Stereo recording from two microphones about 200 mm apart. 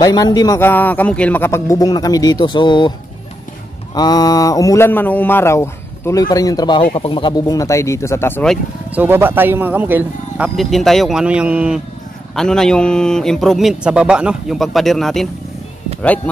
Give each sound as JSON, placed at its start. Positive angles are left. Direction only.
{"t": 0.0, "sound": "speech", "side_deg": 20}
{"t": 3.9, "sound": "speech", "side_deg": 20}
{"t": 8.9, "sound": "a man's voice", "side_deg": -10}